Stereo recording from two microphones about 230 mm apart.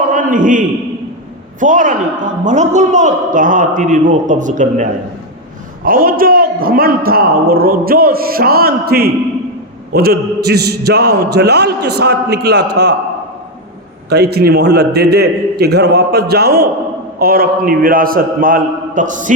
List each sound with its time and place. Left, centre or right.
0.1 s a sound: right
1.5 s a man's voice: right
14.1 s a man's voice: right